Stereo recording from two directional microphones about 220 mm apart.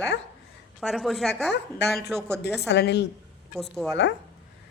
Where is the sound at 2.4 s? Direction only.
50° left (ahead or behind).